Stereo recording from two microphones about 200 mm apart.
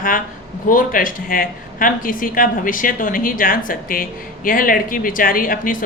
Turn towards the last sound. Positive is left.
turn(degrees=45)  # may be behind; listen again after turning